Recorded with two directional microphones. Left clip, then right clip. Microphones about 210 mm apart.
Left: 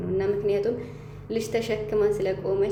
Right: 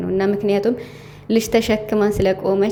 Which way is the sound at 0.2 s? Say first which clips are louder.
Right 5 dB; 40° right (ahead or behind).